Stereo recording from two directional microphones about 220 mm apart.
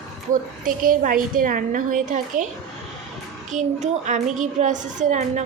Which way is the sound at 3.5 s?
35° right (ahead or behind).